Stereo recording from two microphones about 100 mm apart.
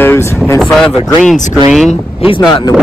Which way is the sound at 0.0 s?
25° left (ahead or behind).